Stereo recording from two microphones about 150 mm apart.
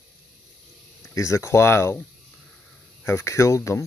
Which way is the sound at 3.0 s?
15° left (ahead or behind).